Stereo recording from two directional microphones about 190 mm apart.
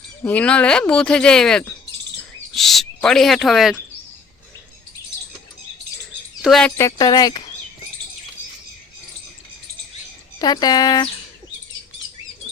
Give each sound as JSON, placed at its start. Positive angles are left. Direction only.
{"t": 0.3, "sound": "speech", "side_deg": 5}
{"t": 6.4, "sound": "speech", "side_deg": 0}
{"t": 6.7, "sound": "speech", "side_deg": 15}
{"t": 10.3, "sound": "speech", "side_deg": 20}